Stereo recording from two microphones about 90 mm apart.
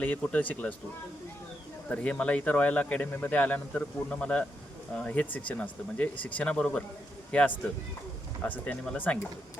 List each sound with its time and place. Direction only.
0.0 s speech: 15° left (ahead or behind)
1.9 s speech: 15° left (ahead or behind)